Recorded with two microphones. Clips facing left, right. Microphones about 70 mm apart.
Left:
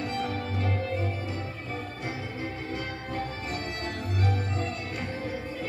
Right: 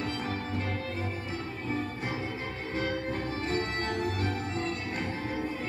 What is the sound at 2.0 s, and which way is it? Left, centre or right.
Music, right.